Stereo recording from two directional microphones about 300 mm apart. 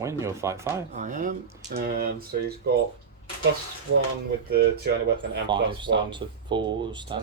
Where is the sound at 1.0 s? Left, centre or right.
Right.